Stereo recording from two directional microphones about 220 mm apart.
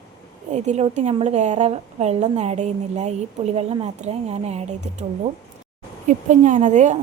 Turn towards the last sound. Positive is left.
turn(degrees=-35)  # may be behind; listen again after turning